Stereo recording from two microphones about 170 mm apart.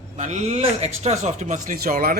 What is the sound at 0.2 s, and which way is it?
A man's voice, 45° right (ahead or behind).